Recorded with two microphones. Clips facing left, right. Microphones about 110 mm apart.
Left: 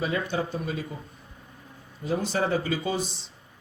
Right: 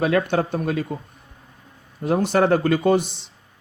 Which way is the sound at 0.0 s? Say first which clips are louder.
Right 8 dB; 70° right (ahead or behind).